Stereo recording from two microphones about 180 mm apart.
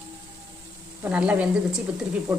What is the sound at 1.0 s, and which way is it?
Speech, 5° right (ahead or behind).